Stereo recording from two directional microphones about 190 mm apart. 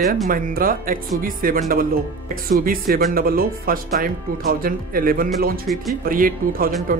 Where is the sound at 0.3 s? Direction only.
50° right (ahead or behind).